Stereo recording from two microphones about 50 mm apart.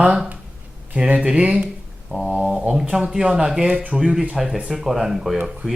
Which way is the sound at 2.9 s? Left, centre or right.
Centre.